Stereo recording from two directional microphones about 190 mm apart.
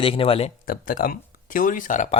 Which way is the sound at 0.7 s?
45° left (ahead or behind).